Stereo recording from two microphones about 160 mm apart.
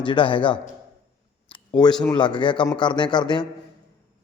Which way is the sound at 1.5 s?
30° left (ahead or behind).